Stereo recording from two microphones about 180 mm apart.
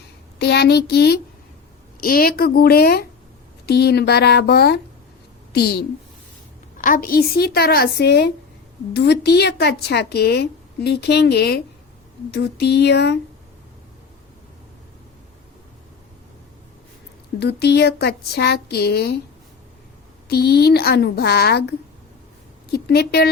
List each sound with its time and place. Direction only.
0.3 s a woman's voice: 65° left (ahead or behind)
6.7 s a woman's voice: 45° left (ahead or behind); by 13.1 s 65° left (ahead or behind)
17.4 s a woman's voice: 65° left (ahead or behind)
20.2 s a woman's voice: 60° left (ahead or behind)